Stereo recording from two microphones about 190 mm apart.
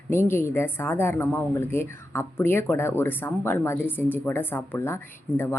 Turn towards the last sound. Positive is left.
turn(degrees=15)  # may be behind; listen again after turning